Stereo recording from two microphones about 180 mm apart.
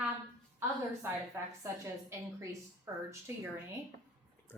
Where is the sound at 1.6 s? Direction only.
15° right (ahead or behind).